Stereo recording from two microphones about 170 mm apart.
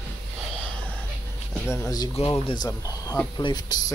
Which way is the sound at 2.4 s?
25° left (ahead or behind).